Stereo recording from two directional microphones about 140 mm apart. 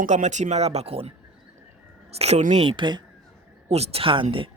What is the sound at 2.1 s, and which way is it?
Speech, 50° right (ahead or behind).